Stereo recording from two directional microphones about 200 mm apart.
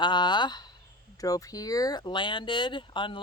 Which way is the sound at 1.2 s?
15° left (ahead or behind).